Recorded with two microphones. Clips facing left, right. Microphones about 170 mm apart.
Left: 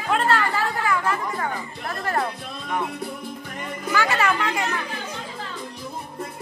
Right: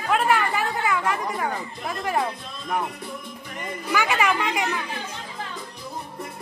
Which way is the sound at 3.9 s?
15° right (ahead or behind).